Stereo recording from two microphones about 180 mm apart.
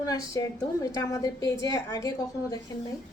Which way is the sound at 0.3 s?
20° left (ahead or behind).